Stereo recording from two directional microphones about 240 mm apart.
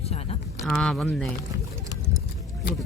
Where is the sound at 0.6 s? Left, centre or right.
Centre.